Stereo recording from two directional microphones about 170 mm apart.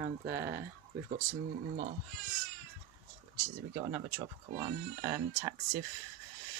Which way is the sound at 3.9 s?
15° right (ahead or behind).